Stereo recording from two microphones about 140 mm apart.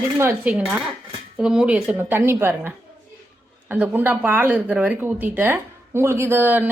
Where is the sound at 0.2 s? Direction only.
15° right (ahead or behind).